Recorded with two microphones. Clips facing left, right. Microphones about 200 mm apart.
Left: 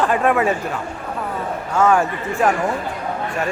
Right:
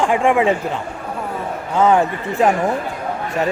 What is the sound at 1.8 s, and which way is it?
Speech, 20° right (ahead or behind).